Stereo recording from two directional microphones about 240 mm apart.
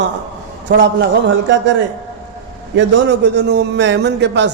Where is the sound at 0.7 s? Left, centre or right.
Right.